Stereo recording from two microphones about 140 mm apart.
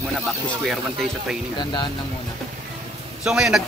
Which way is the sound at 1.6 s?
35° left (ahead or behind).